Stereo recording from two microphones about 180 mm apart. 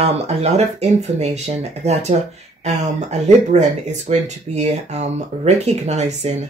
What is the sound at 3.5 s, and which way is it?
Speech, 40° right (ahead or behind).